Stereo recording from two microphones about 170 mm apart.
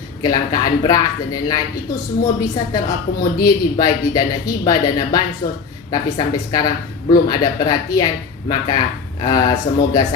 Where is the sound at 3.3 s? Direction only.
20° left (ahead or behind).